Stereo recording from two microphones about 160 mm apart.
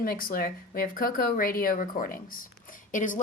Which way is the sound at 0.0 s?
65° left (ahead or behind).